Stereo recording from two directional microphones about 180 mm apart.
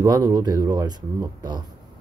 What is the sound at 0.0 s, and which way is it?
Speech, 20° right (ahead or behind).